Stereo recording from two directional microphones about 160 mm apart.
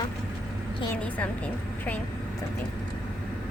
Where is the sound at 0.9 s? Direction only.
10° left (ahead or behind).